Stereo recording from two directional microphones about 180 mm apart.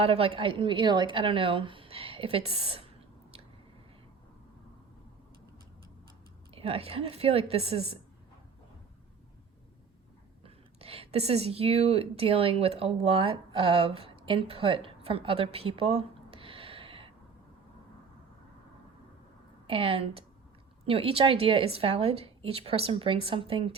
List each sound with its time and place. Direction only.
0.0 s a woman's voice: 30° right (ahead or behind)
6.5 s a woman's voice: 30° right (ahead or behind)
10.4 s speech: 35° right (ahead or behind)
19.6 s a woman's voice: 30° right (ahead or behind)